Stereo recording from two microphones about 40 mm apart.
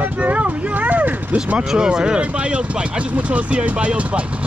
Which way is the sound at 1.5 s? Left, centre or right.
Right.